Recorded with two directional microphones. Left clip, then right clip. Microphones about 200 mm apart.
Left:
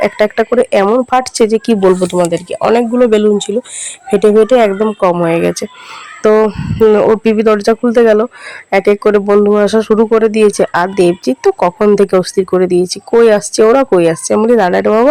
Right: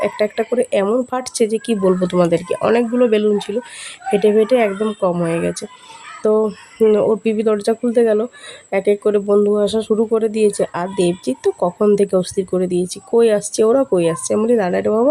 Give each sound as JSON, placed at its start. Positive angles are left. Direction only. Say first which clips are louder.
{"t": 0.0, "sound": "speech", "louder": "left 7 dB", "side_deg": 15}
{"t": 2.1, "sound": "speech", "louder": "left 3 dB", "side_deg": 5}
{"t": 6.6, "sound": "speech", "louder": "left 6 dB", "side_deg": 10}